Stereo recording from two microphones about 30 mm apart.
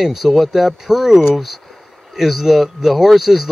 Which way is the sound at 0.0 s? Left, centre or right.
Centre.